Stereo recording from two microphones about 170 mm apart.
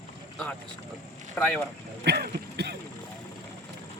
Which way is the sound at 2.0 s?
75° right (ahead or behind).